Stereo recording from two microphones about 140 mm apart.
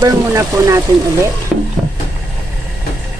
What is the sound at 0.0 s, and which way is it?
Speech, 20° right (ahead or behind).